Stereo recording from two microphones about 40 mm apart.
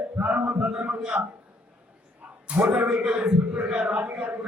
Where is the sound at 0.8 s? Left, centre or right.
Right.